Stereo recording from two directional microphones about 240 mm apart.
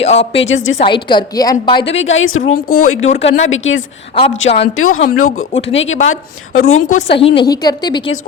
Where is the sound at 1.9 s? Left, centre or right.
Left.